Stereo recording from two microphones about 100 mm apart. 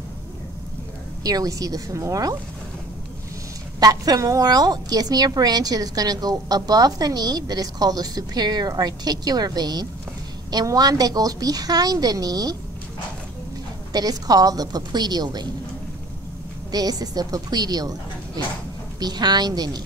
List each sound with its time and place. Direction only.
1.2 s a woman's voice: 40° right (ahead or behind)
3.8 s a woman's voice: 40° right (ahead or behind)
13.9 s a woman's voice: 40° right (ahead or behind)
16.7 s a woman's voice: 40° right (ahead or behind)